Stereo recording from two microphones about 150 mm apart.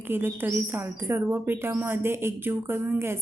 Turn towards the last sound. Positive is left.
turn(degrees=-15)  # may be behind; listen again after turning